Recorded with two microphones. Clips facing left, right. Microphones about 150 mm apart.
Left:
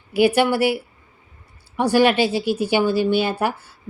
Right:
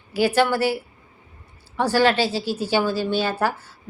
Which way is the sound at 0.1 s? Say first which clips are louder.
Left 3 dB; 15° left (ahead or behind).